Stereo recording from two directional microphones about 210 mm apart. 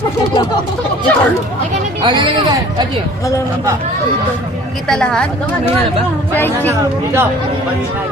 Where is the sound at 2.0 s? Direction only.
20° right (ahead or behind).